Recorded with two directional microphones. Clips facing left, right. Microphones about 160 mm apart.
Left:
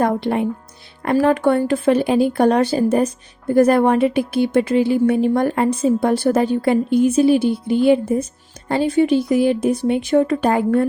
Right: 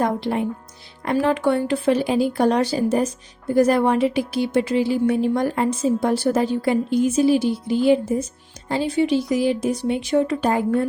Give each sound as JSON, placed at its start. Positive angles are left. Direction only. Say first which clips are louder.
{"t": 0.0, "sound": "a woman's voice", "louder": "left 3 dB", "side_deg": 60}
{"t": 1.1, "sound": "a woman's voice", "louder": "left 4 dB", "side_deg": 45}